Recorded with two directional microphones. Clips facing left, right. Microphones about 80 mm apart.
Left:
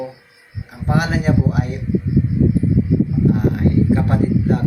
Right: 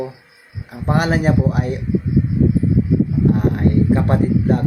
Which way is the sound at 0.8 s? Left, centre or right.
Right.